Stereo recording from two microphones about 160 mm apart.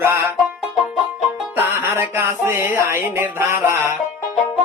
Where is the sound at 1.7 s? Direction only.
15° right (ahead or behind).